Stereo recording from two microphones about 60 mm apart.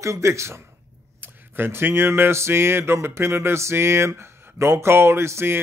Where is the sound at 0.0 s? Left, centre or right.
Right.